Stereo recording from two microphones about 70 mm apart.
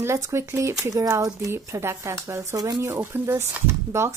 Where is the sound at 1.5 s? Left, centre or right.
Right.